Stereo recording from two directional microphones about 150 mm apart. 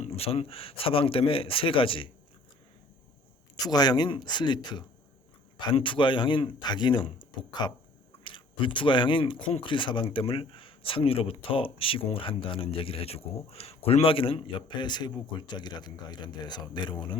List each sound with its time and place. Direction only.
0.0 s speech: 40° left (ahead or behind)
3.6 s speech: 25° left (ahead or behind)